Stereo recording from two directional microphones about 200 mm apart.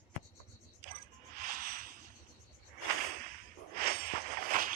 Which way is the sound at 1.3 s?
45° right (ahead or behind).